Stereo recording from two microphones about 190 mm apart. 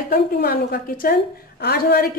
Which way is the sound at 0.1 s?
50° left (ahead or behind).